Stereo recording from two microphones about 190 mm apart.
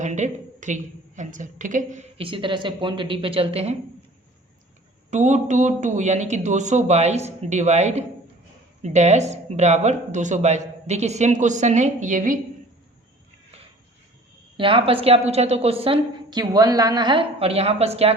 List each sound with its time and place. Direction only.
0.0 s a woman's voice: 40° right (ahead or behind)
5.1 s a woman's voice: 40° right (ahead or behind)
14.5 s a woman's voice: 25° right (ahead or behind)